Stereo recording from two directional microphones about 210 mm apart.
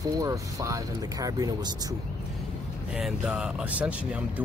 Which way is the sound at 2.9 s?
5° right (ahead or behind).